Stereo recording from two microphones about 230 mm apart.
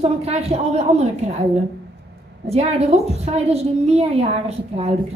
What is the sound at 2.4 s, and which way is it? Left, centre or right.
A woman's voice, right.